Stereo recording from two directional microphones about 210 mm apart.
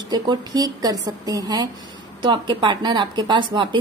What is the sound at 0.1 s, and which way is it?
A woman's voice, 20° right (ahead or behind).